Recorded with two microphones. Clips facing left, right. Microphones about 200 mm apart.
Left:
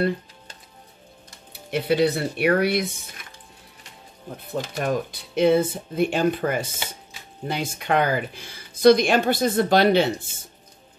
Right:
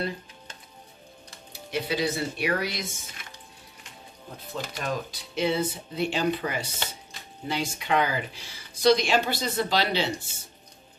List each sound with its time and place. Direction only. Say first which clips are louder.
1.7 s speech: left 7 dB; 60° left (ahead or behind)
4.7 s speech: left 7 dB; 55° left (ahead or behind)